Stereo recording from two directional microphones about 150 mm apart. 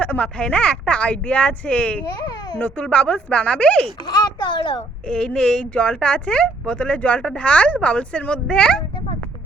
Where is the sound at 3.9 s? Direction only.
30° left (ahead or behind).